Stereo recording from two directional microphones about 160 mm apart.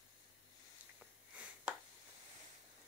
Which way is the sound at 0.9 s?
10° right (ahead or behind).